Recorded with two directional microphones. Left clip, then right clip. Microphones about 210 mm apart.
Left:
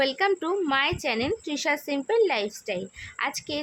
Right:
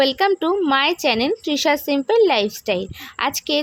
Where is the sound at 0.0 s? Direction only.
25° right (ahead or behind).